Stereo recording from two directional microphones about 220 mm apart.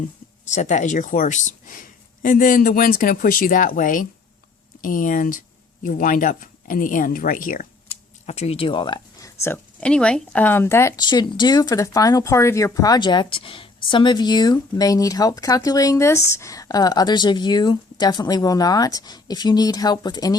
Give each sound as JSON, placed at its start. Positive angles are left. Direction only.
{"t": 0.4, "sound": "speech", "side_deg": 30}